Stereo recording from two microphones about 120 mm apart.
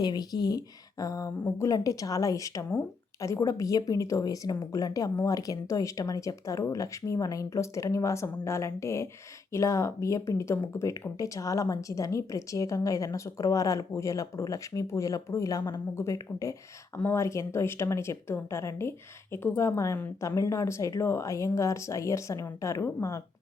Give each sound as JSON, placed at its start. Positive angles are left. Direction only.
{"t": 0.0, "sound": "speech", "side_deg": 35}